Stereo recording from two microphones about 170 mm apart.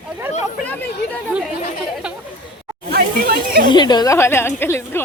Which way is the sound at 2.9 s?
60° right (ahead or behind).